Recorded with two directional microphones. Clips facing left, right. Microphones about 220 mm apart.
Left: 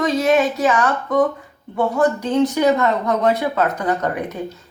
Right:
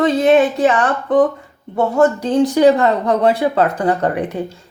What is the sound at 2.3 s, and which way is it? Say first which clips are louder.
Speech: right 5 dB; 35° right (ahead or behind).